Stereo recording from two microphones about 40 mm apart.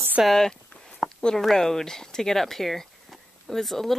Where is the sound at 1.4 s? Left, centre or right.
Centre.